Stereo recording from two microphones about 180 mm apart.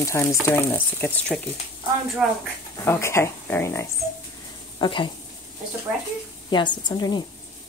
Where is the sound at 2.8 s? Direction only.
15° left (ahead or behind).